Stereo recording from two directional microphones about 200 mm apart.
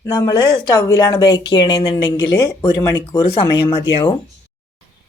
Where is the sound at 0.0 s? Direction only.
20° left (ahead or behind).